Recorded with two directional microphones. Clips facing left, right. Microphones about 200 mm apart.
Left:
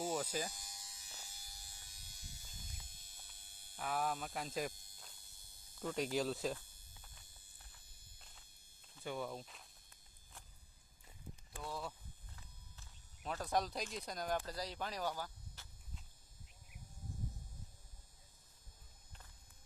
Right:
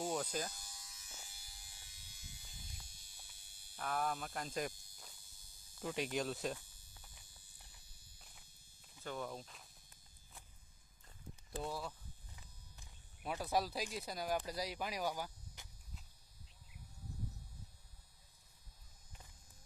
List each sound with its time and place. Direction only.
0.0 s electric shaver: 5° left (ahead or behind)
0.6 s electric shaver: 25° left (ahead or behind)
1.3 s electric shaver: 45° left (ahead or behind)
3.8 s speech: 5° left (ahead or behind)
4.7 s speech: 55° left (ahead or behind)
5.2 s cricket: 60° left (ahead or behind)
5.8 s speech: 5° right (ahead or behind)
7.8 s walk: 50° left (ahead or behind)
9.0 s speech: 5° left (ahead or behind)
11.6 s speech: centre (ahead or behind)
12.7 s speech: 15° right (ahead or behind)